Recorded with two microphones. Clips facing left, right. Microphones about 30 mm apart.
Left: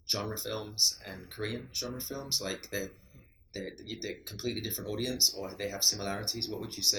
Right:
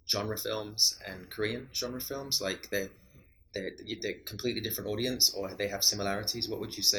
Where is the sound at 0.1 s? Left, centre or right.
Centre.